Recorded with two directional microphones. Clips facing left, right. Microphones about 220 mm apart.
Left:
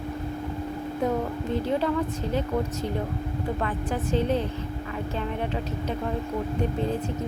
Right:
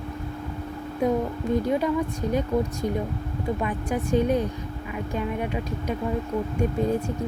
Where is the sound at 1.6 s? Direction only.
15° right (ahead or behind).